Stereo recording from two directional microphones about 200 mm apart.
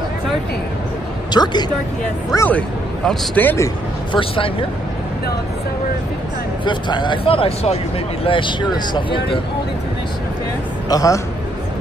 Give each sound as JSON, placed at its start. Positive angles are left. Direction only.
{"t": 1.3, "sound": "speech", "side_deg": 20}
{"t": 2.3, "sound": "a man's voice", "side_deg": 10}
{"t": 4.2, "sound": "speech", "side_deg": 25}
{"t": 6.6, "sound": "speech", "side_deg": 20}
{"t": 10.9, "sound": "a man's voice", "side_deg": 15}